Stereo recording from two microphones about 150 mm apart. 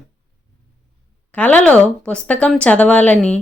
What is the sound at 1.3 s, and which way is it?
Speech, 10° left (ahead or behind).